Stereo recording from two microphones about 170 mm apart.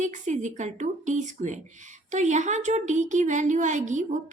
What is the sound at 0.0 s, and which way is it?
A woman's voice, 45° right (ahead or behind).